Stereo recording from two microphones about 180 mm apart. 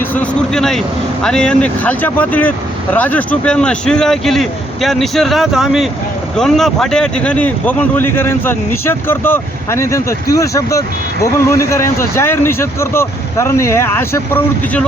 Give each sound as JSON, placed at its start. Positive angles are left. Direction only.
{"t": 0.1, "sound": "speech", "side_deg": 5}